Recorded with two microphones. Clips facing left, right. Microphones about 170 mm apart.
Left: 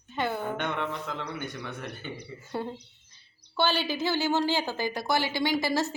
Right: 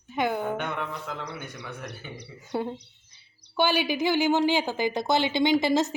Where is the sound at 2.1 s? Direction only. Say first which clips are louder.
Left 2 dB; 80° right.